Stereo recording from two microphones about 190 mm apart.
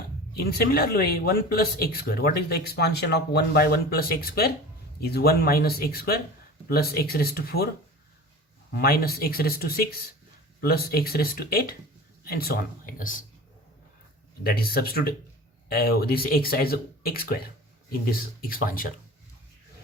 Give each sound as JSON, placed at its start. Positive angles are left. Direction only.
{"t": 0.3, "sound": "speech", "side_deg": 55}
{"t": 8.7, "sound": "speech", "side_deg": 55}
{"t": 14.4, "sound": "speech", "side_deg": 55}